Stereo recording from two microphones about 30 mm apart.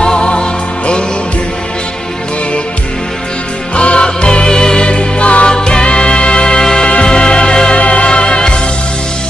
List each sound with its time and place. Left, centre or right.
0.0 s music: left
3.7 s music: left
4.5 s music: left
5.5 s music: left
7.8 s music: left